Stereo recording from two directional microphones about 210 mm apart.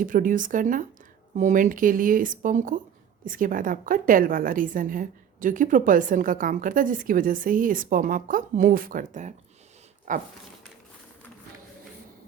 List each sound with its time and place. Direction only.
0.0 s a woman's voice: 40° right (ahead or behind)